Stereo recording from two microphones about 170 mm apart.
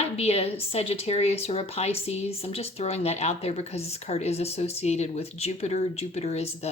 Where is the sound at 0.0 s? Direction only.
35° left (ahead or behind).